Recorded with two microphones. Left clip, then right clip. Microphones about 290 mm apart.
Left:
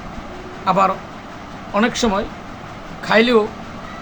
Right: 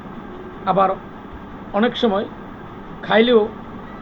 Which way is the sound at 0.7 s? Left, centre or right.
Centre.